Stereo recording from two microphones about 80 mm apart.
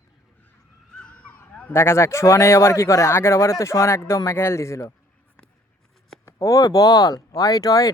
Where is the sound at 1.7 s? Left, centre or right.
Left.